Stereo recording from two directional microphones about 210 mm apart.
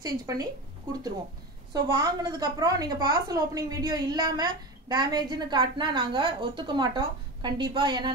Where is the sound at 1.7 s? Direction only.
20° right (ahead or behind).